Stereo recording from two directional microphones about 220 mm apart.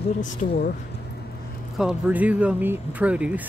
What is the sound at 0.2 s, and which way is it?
Speech, 35° left (ahead or behind).